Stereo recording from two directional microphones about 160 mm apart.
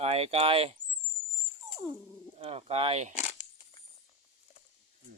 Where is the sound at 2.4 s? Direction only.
40° right (ahead or behind).